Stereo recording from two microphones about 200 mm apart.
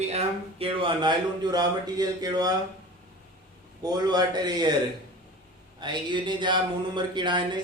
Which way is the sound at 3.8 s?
20° right (ahead or behind).